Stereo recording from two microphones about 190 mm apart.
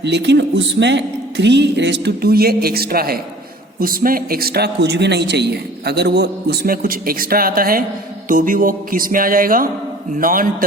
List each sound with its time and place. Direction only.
0.0 s a man's voice: 65° right (ahead or behind); by 10.5 s 45° right (ahead or behind)